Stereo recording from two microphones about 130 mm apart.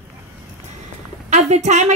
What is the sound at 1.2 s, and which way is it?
Speech, 60° right (ahead or behind).